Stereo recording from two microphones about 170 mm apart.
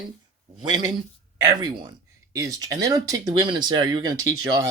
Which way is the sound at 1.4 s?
25° right (ahead or behind).